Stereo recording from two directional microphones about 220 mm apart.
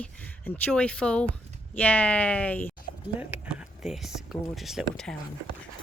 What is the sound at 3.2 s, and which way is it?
Speech, 5° right (ahead or behind).